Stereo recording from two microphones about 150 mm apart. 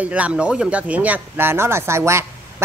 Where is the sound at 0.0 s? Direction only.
10° right (ahead or behind).